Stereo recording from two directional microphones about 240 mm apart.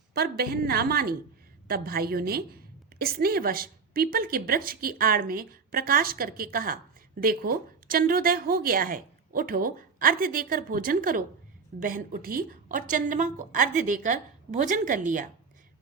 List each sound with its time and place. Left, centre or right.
0.1 s a woman's voice: right